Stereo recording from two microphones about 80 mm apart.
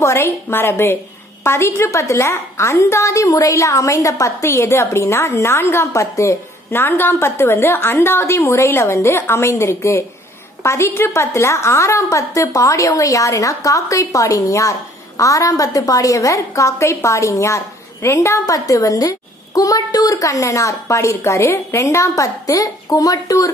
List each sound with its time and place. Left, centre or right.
0.0 s a woman's voice: left